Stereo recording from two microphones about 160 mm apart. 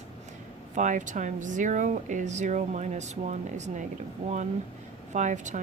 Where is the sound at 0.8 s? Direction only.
50° right (ahead or behind).